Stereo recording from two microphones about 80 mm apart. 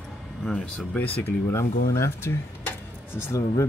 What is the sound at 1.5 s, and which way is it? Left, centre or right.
Speech, left.